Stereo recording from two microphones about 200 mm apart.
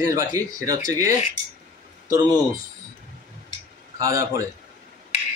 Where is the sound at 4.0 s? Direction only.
15° right (ahead or behind).